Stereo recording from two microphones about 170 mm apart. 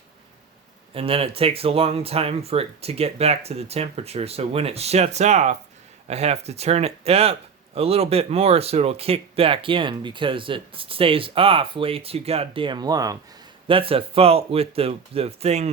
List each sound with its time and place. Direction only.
0.9 s speech: 35° right (ahead or behind)
13.7 s speech: 30° right (ahead or behind)